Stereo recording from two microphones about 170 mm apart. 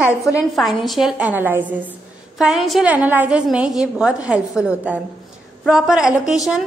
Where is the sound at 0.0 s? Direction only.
15° left (ahead or behind).